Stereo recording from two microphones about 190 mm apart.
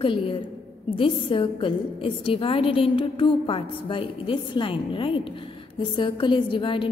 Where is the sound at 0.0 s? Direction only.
30° left (ahead or behind).